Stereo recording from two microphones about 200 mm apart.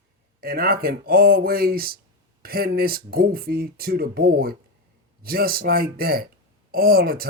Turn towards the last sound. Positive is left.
turn(degrees=-50)  # may be behind; listen again after turning